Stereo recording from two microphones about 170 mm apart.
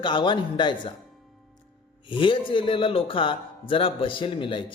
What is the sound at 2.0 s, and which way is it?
Speech, 30° left (ahead or behind).